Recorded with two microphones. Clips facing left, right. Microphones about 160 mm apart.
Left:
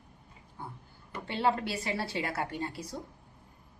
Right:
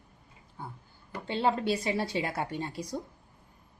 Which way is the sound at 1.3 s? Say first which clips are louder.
Right 2 dB; 20° right (ahead or behind).